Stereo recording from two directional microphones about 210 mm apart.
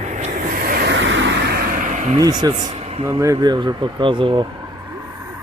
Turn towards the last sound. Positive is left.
turn(degrees=-20)  # may be behind; listen again after turning